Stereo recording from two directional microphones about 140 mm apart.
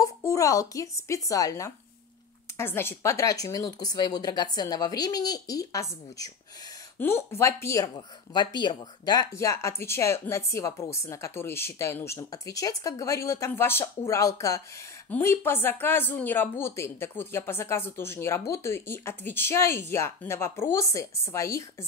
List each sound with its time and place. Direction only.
0.0 s speech: 20° left (ahead or behind)